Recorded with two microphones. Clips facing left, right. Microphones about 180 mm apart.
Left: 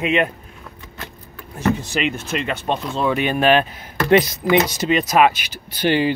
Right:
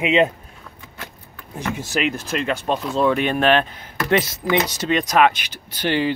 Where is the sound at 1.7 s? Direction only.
5° right (ahead or behind).